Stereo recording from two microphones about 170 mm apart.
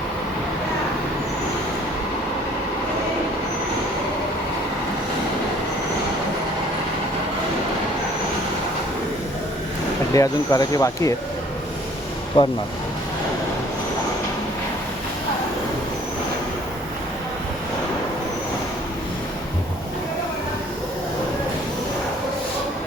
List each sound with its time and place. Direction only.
10.2 s speech: 20° left (ahead or behind)
12.4 s speech: 30° left (ahead or behind)